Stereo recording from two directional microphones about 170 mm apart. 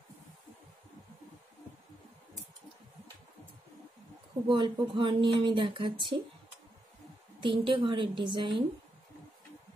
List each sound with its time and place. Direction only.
4.5 s speech: 30° right (ahead or behind)
7.4 s speech: 30° right (ahead or behind)